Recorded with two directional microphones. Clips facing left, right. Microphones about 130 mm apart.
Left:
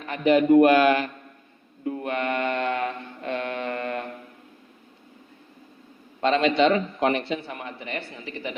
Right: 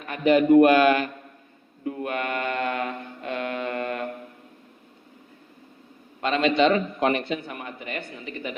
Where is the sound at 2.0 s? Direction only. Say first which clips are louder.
Left 2 dB; 30° left (ahead or behind).